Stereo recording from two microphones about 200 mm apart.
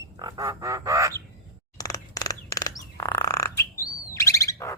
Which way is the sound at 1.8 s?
20° left (ahead or behind).